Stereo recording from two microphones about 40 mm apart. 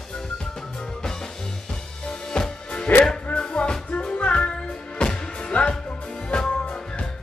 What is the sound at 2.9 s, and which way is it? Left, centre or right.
Music, left.